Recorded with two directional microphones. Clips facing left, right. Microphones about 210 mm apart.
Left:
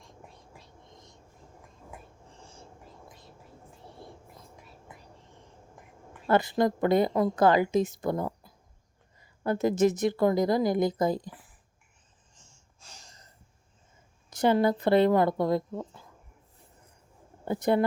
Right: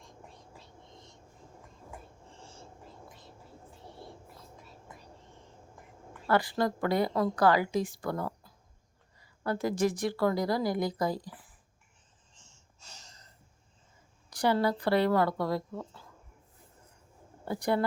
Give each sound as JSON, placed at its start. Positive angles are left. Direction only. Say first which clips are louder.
{"t": 6.2, "sound": "speech", "louder": "left 4 dB", "side_deg": 20}
{"t": 14.3, "sound": "speech", "louder": "left 4 dB", "side_deg": 20}
{"t": 17.4, "sound": "speech", "louder": "left 4 dB", "side_deg": 20}